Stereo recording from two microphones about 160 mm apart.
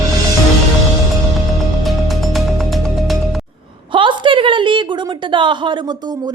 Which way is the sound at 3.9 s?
30° right (ahead or behind).